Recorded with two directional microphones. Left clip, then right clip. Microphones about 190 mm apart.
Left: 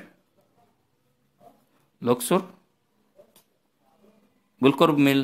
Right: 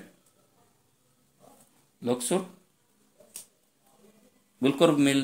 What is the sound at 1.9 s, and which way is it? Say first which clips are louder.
Speech: left 6 dB; 45° left (ahead or behind).